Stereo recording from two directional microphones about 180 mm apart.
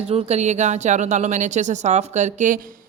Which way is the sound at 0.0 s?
35° right (ahead or behind).